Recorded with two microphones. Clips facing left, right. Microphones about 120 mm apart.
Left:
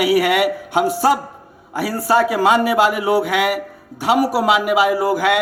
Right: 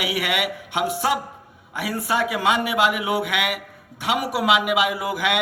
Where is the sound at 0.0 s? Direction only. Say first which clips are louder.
Left 10 dB; 40° left (ahead or behind).